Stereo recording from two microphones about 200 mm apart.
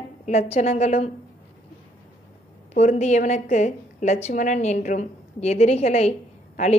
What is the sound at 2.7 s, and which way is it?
A woman's voice, 35° left (ahead or behind).